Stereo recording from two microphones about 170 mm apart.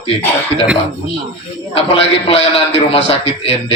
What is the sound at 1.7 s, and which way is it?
A man's voice, 35° left (ahead or behind).